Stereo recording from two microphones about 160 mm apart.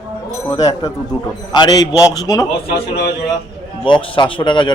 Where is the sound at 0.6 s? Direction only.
25° left (ahead or behind).